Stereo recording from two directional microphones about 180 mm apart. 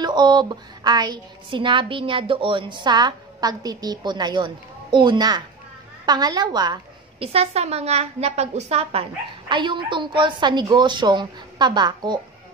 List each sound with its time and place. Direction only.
0.0 s a woman's voice: 25° right (ahead or behind)